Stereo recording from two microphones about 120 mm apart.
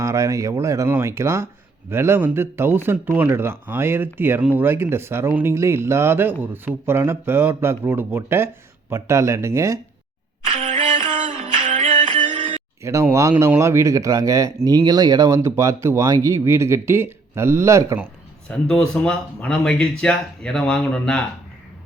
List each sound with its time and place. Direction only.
0.0 s speech: 25° right (ahead or behind)
11.3 s music: 90° right
12.4 s a sound: 85° right
12.8 s speech: 25° right (ahead or behind)
18.4 s speech: 10° left (ahead or behind)